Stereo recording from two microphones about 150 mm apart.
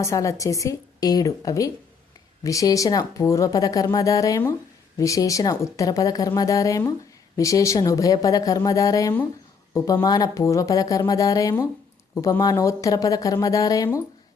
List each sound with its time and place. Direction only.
0.0 s speech: 20° left (ahead or behind)